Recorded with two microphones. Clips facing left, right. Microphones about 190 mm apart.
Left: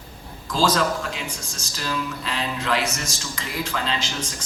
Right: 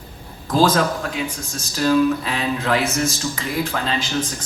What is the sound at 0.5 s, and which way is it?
Speech, 50° right (ahead or behind).